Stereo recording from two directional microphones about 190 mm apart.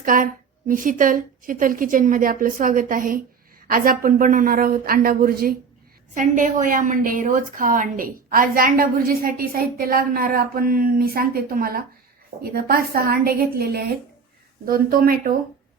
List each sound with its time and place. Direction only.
0.0 s a woman's voice: 45° right (ahead or behind)